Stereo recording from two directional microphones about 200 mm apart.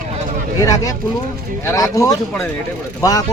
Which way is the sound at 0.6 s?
15° left (ahead or behind).